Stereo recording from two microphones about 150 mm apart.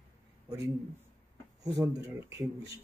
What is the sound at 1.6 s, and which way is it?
Speech, 20° right (ahead or behind).